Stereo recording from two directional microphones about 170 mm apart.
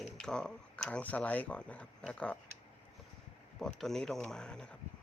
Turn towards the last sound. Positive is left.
turn(degrees=5)  # may be behind; listen again after turning